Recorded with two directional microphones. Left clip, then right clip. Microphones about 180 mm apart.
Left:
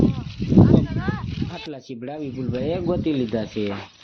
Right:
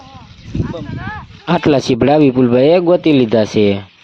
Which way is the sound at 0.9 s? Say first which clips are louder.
Right 3 dB; 75° left (ahead or behind).